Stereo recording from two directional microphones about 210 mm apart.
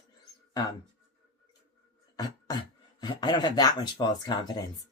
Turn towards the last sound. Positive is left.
turn(degrees=20)  # may be behind; listen again after turning